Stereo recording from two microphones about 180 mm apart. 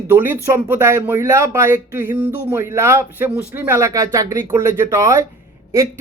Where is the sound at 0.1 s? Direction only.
10° right (ahead or behind).